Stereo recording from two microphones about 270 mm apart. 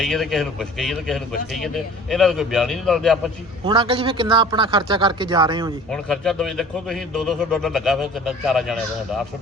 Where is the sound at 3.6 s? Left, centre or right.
Centre.